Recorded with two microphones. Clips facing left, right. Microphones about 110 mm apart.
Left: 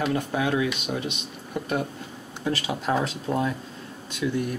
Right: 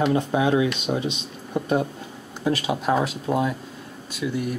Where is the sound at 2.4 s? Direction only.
15° right (ahead or behind).